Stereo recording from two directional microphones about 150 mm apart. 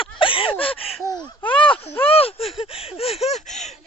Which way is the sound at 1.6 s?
35° left (ahead or behind).